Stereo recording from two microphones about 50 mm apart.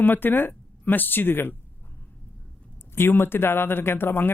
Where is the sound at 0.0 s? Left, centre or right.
Left.